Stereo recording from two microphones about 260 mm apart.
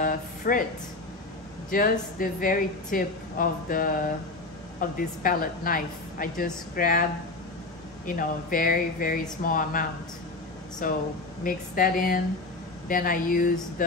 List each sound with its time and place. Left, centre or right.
0.0 s a sound: left
1.7 s speech: left
8.2 s speech: left